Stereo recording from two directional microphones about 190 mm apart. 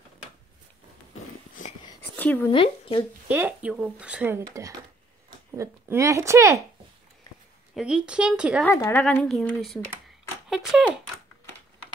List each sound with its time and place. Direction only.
2.1 s speech: 10° left (ahead or behind)
2.5 s speech: 25° left (ahead or behind)
3.3 s speech: 10° right (ahead or behind)
5.5 s speech: 15° right (ahead or behind)
7.7 s a woman's voice: 5° right (ahead or behind)
8.6 s a woman's voice: 15° left (ahead or behind)